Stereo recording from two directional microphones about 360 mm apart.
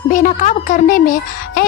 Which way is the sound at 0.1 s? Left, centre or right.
Left.